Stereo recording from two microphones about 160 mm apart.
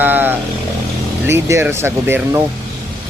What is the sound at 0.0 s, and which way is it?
Vehicle, 10° right (ahead or behind).